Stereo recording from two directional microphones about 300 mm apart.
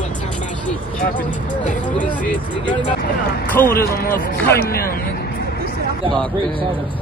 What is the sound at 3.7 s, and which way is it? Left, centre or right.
Speech, left.